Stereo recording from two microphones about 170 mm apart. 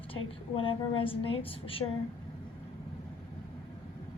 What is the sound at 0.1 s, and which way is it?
A woman's voice, 30° left (ahead or behind).